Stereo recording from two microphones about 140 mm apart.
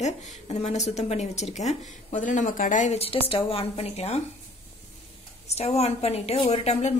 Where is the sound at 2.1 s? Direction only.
65° left (ahead or behind); by 4.2 s 45° left (ahead or behind).